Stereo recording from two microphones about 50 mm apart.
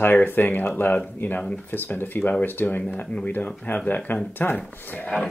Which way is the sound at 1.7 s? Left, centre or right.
Left.